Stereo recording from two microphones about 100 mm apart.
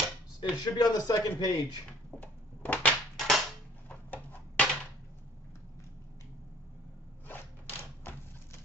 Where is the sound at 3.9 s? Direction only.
15° left (ahead or behind).